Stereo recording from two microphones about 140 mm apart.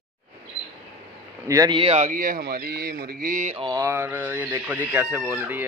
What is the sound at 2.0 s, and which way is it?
Speech, 75° right (ahead or behind).